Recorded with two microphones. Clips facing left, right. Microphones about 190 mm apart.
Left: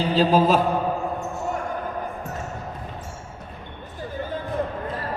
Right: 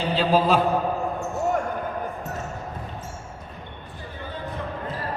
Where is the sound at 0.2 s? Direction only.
45° left (ahead or behind).